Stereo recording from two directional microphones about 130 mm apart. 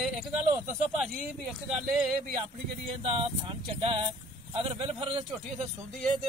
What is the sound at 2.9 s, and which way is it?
Speech, 45° right (ahead or behind).